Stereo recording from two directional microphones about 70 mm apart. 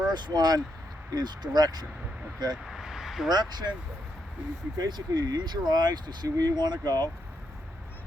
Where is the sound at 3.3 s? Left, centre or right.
Right.